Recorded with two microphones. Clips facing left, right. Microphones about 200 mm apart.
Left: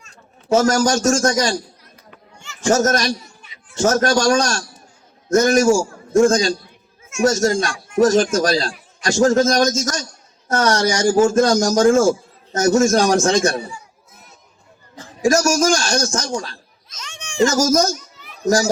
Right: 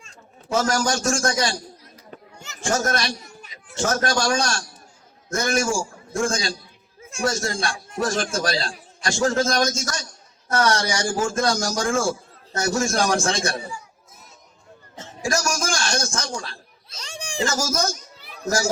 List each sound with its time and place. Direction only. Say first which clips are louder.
0.1 s a man's voice: left 8 dB; 40° left (ahead or behind)
2.0 s chatter: right 2 dB; 40° right (ahead or behind)
2.6 s a man's voice: left 7 dB; 45° left (ahead or behind)
15.2 s a man's voice: left 9 dB; 40° left (ahead or behind)
16.9 s a sound: right 3 dB; 35° right (ahead or behind)
17.7 s a man's voice: left 9 dB; 40° left (ahead or behind)
18.4 s speech: left 6 dB; 15° left (ahead or behind)